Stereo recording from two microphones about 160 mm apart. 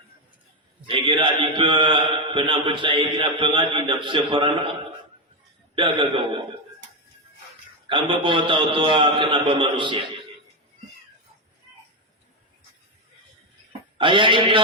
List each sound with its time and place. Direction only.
0.9 s speech: 30° right (ahead or behind)
5.7 s speech: 30° right (ahead or behind)
7.9 s speech: 30° right (ahead or behind)
14.0 s speech: 30° right (ahead or behind)